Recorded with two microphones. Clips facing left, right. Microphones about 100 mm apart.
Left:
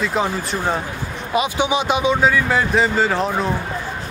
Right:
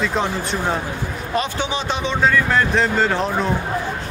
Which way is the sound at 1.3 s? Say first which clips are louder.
Left 4 dB; 10° left (ahead or behind).